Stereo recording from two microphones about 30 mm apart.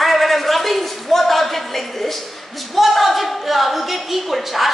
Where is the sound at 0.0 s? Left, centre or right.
Centre.